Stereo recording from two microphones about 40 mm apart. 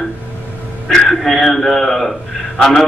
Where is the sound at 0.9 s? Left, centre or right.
Centre.